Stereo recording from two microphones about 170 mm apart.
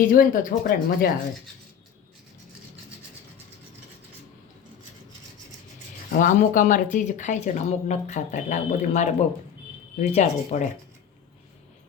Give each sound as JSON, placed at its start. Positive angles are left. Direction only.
{"t": 0.0, "sound": "speech", "side_deg": 55}
{"t": 6.1, "sound": "speech", "side_deg": 50}
{"t": 10.1, "sound": "speech", "side_deg": 45}